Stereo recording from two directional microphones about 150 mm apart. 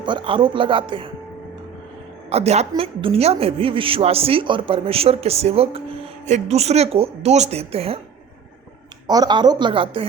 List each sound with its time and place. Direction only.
0.0 s a woman's voice: 30° right (ahead or behind)
2.3 s a woman's voice: 45° right (ahead or behind)
9.0 s a woman's voice: 25° right (ahead or behind)